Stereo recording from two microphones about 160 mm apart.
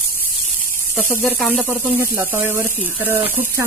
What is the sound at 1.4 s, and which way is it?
Speech, centre (ahead or behind).